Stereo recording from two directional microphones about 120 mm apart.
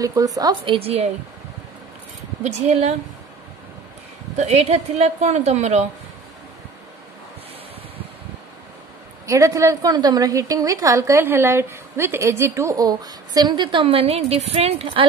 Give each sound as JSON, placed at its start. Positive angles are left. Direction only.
{"t": 0.0, "sound": "a woman's voice", "side_deg": -30}
{"t": 0.7, "sound": "a woman's voice", "side_deg": -55}
{"t": 2.4, "sound": "a woman's voice", "side_deg": -70}
{"t": 4.4, "sound": "a woman's voice", "side_deg": -65}
{"t": 9.2, "sound": "a woman's voice", "side_deg": -25}